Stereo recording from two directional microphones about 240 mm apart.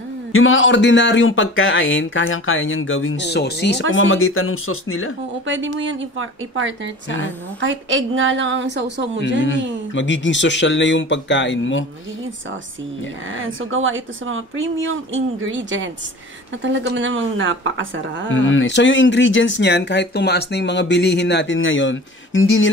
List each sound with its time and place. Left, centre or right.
0.3 s speech: left
3.9 s speech: left
5.5 s speech: right
9.9 s speech: left
13.3 s speech: right
18.3 s speech: left